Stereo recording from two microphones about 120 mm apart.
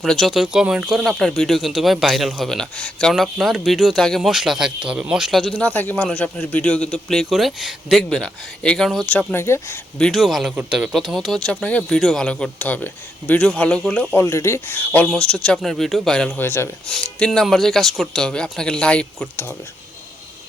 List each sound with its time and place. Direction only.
0.0 s a man's voice: centre (ahead or behind); by 9.8 s 20° left (ahead or behind)
10.0 s a man's voice: centre (ahead or behind)
14.2 s a man's voice: 25° left (ahead or behind)
15.5 s speech: centre (ahead or behind)
16.4 s speech: 20° left (ahead or behind)
16.9 s speech: 5° left (ahead or behind)